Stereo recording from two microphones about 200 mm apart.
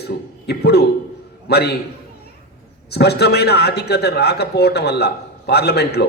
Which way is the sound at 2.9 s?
55° left (ahead or behind).